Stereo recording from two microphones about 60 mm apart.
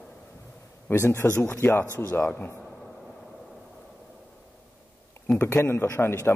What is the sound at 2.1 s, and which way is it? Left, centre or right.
Speech, left.